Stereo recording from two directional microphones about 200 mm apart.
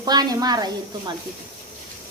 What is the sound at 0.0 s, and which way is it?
A woman's voice, 20° right (ahead or behind).